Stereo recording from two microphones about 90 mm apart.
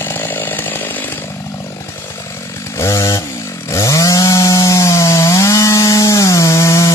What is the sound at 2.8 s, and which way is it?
Chainsaw, 35° left (ahead or behind).